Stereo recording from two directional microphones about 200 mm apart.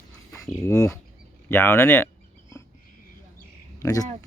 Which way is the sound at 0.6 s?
15° left (ahead or behind).